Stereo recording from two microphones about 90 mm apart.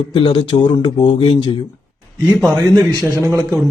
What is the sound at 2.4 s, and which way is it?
A man's voice, 45° right (ahead or behind).